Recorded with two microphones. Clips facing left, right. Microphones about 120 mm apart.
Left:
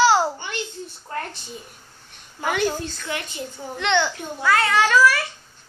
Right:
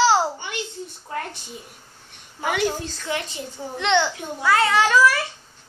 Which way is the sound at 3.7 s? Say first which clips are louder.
Right 1 dB; 15° right (ahead or behind).